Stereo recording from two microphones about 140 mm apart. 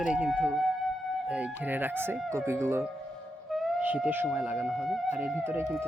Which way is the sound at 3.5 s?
Centre (ahead or behind).